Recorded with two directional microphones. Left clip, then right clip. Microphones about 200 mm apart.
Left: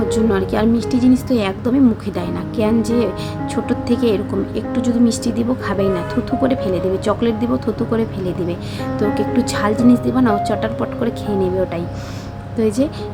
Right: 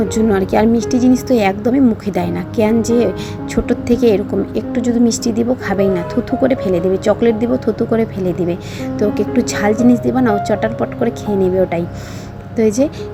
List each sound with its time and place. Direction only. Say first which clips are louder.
0.1 s a woman's voice: right 3 dB; 15° right (ahead or behind)